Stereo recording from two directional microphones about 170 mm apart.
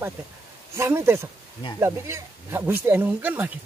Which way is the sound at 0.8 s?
15° right (ahead or behind).